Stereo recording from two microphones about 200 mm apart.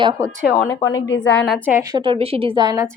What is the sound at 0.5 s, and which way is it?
Speech, 15° left (ahead or behind).